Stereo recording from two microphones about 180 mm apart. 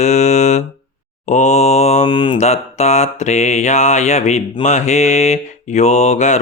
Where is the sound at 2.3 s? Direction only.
40° left (ahead or behind).